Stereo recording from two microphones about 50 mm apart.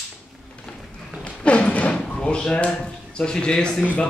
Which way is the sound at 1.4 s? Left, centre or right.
Left.